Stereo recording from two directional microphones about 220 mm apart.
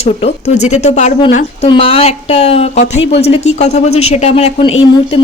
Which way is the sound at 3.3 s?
30° left (ahead or behind).